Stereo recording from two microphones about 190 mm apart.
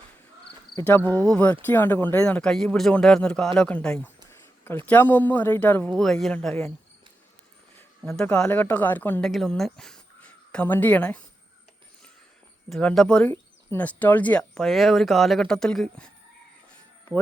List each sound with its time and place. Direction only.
0.8 s a man's voice: 10° left (ahead or behind)
4.3 s a sound: 10° left (ahead or behind)
4.9 s a man's voice: 10° left (ahead or behind)
7.8 s a man's voice: 10° left (ahead or behind)
12.7 s speech: centre (ahead or behind)